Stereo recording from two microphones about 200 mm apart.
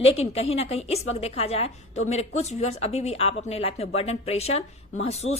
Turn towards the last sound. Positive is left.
turn(degrees=30)  # may be behind; listen again after turning